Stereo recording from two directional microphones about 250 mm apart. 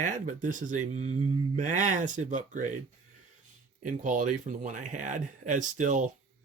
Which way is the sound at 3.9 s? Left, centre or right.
Right.